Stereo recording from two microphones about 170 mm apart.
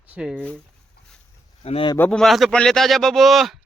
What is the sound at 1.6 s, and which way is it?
Speech, 35° left (ahead or behind).